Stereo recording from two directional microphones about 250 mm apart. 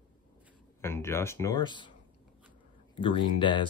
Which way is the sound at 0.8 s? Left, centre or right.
Centre.